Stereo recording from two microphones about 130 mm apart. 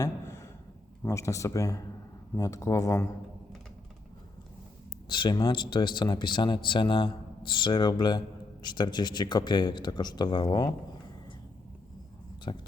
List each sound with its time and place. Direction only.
0.0 s a sound: 20° left (ahead or behind)
1.0 s speech: 25° left (ahead or behind)
5.0 s a man's voice: 35° left (ahead or behind)
12.5 s a man's voice: 40° left (ahead or behind)